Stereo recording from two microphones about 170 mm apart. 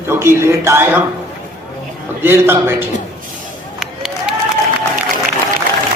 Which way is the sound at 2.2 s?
15° right (ahead or behind).